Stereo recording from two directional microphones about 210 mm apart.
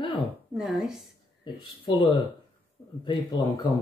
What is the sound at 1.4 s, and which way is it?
Speech, 20° left (ahead or behind).